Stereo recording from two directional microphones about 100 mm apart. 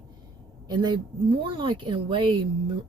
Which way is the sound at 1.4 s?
55° right (ahead or behind).